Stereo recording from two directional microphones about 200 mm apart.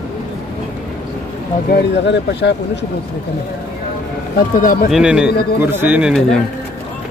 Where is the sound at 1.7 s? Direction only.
60° left (ahead or behind).